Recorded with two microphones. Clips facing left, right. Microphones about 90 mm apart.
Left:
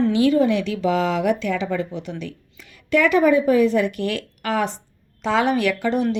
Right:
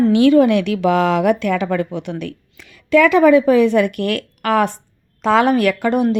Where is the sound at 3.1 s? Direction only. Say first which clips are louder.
Right 4 dB; 90° right.